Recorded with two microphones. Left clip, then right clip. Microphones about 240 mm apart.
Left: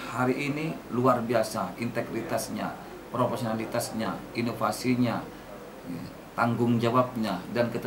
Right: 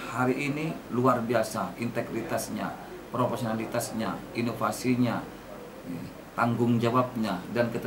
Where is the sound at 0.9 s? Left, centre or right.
Centre.